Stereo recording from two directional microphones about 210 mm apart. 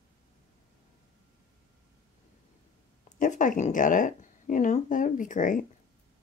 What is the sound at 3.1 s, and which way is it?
Speech, 35° left (ahead or behind).